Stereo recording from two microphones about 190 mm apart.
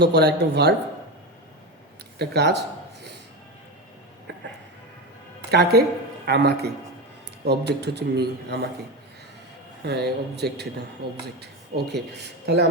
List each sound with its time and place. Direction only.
0.0 s speech: 60° right (ahead or behind)
2.1 s speech: 60° right (ahead or behind)
5.5 s speech: 60° right (ahead or behind)
9.8 s speech: 60° right (ahead or behind)